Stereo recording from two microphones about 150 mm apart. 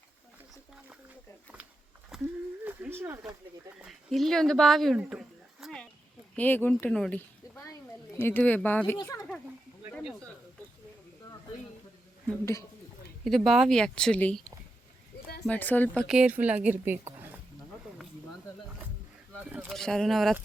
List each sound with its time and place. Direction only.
2.1 s a sound: 5° right (ahead or behind)
2.6 s a sound: 15° right (ahead or behind)
3.8 s speech: centre (ahead or behind)
6.3 s speech: 10° left (ahead or behind)
8.2 s speech: 15° left (ahead or behind)
9.0 s speech: 25° left (ahead or behind)
9.9 s speech: centre (ahead or behind)
13.2 s speech: centre (ahead or behind)
15.4 s speech: 10° left (ahead or behind)
16.0 s a woman's voice: 5° right (ahead or behind)
19.5 s a woman's voice: 10° right (ahead or behind)
19.7 s speech: 5° left (ahead or behind)